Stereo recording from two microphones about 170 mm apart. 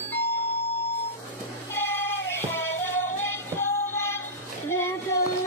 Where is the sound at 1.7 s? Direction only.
15° left (ahead or behind).